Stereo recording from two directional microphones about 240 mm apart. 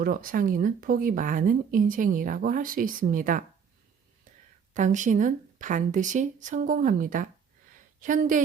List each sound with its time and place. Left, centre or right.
0.0 s speech: right
4.7 s speech: right